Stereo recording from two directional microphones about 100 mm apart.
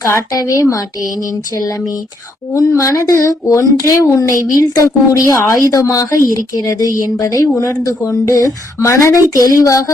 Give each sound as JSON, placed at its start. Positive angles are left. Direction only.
{"t": 0.0, "sound": "speech", "side_deg": 35}
{"t": 2.5, "sound": "speech", "side_deg": 30}